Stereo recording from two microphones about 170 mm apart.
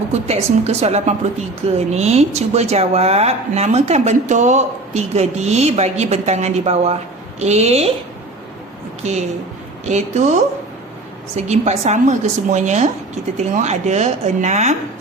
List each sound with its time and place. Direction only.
0.1 s a woman's voice: 40° right (ahead or behind)
9.9 s a woman's voice: 40° right (ahead or behind)
11.4 s a woman's voice: 40° right (ahead or behind)